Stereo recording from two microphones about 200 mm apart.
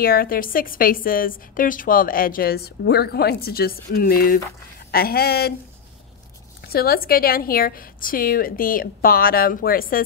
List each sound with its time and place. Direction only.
0.0 s a woman's voice: 45° left (ahead or behind)
6.6 s a woman's voice: 50° left (ahead or behind)